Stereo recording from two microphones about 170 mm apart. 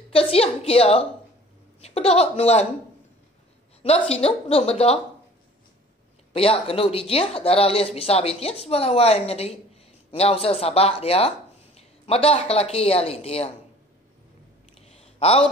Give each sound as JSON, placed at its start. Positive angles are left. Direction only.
{"t": 0.1, "sound": "a woman's voice", "side_deg": 35}
{"t": 3.8, "sound": "speech", "side_deg": 35}
{"t": 6.3, "sound": "speech", "side_deg": 35}
{"t": 14.9, "sound": "a sound", "side_deg": 35}